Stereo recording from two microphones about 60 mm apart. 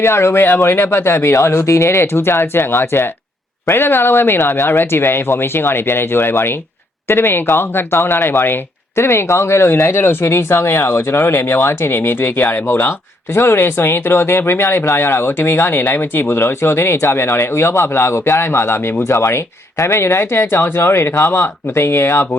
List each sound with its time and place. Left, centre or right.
0.0 s speech: left